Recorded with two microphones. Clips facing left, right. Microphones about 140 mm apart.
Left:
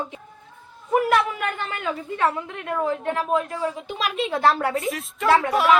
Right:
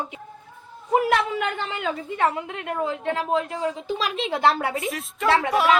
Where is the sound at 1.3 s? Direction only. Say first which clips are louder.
Right 1 dB; 25° right (ahead or behind).